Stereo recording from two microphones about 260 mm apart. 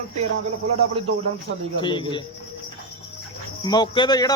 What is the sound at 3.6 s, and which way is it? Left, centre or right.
Speech, centre.